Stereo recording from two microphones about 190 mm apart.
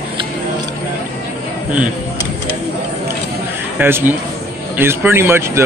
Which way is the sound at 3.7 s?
10° right (ahead or behind).